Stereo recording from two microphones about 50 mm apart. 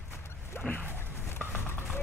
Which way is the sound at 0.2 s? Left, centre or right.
Left.